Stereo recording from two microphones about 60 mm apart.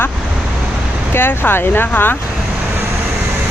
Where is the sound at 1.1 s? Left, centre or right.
Left.